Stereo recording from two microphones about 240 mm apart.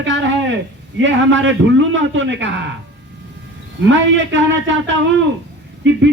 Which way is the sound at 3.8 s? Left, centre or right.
Right.